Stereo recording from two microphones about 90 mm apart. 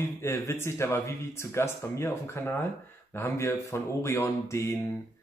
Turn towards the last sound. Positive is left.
turn(degrees=30)  # may be behind; listen again after turning